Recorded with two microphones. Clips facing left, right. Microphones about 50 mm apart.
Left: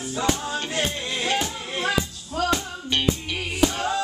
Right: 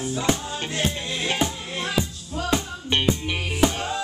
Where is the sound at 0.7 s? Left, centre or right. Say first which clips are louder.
Right 3 dB; centre.